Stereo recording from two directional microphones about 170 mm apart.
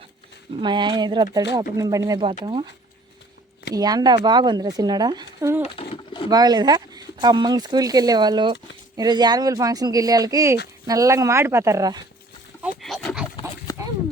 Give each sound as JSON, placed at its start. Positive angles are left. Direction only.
{"t": 0.6, "sound": "speech", "side_deg": -25}
{"t": 2.2, "sound": "speech", "side_deg": -30}
{"t": 3.8, "sound": "speech", "side_deg": -20}
{"t": 5.7, "sound": "pigeon", "side_deg": 35}
{"t": 6.3, "sound": "speech", "side_deg": -25}
{"t": 12.8, "sound": "pig", "side_deg": 0}